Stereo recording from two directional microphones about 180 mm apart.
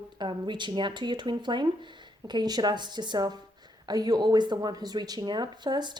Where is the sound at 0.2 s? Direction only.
25° right (ahead or behind).